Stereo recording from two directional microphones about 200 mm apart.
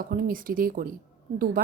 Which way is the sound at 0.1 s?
45° right (ahead or behind).